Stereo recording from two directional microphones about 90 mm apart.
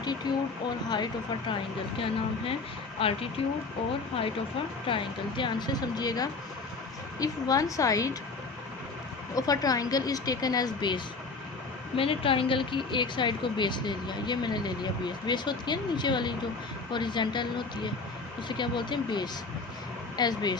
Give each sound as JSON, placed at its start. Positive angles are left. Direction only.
{"t": 0.3, "sound": "speech", "side_deg": 50}
{"t": 2.0, "sound": "speech", "side_deg": 90}
{"t": 4.9, "sound": "a woman's voice", "side_deg": 70}
{"t": 9.3, "sound": "speech", "side_deg": 45}
{"t": 11.9, "sound": "a woman's voice", "side_deg": 85}